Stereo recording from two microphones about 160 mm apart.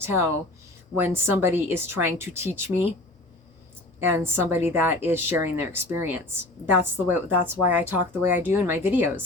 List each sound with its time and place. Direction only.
0.0 s a woman's voice: 15° right (ahead or behind)
4.0 s a woman's voice: 15° right (ahead or behind)